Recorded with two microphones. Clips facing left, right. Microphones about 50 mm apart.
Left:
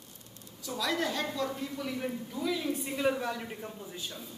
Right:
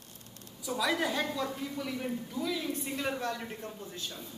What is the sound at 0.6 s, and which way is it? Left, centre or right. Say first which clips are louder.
Speech: right 1 dB; centre.